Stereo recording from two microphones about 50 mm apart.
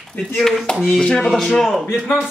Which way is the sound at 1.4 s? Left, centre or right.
Centre.